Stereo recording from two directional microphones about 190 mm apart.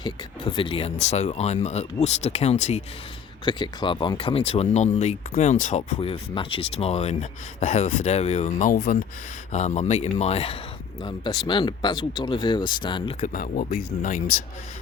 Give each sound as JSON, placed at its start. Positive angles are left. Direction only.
{"t": 0.0, "sound": "speech", "side_deg": 25}
{"t": 3.4, "sound": "speech", "side_deg": 25}
{"t": 6.0, "sound": "speech", "side_deg": 30}
{"t": 9.5, "sound": "speech", "side_deg": 35}
{"t": 13.1, "sound": "speech", "side_deg": 45}